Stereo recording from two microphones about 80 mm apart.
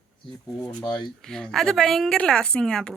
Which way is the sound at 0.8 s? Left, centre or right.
Left.